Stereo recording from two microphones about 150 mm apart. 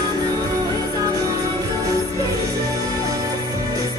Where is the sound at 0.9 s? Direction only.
25° right (ahead or behind).